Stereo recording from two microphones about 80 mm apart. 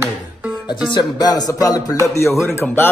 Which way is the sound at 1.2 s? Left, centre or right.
Left.